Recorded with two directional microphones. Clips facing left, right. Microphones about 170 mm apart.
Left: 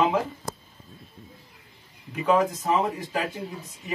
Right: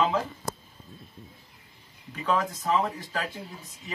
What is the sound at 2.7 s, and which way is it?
Speech, 15° left (ahead or behind).